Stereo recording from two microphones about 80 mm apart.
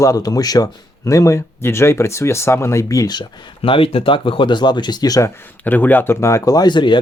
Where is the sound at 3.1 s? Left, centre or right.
Left.